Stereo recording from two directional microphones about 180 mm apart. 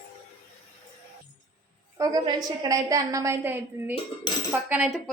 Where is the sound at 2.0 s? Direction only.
20° right (ahead or behind).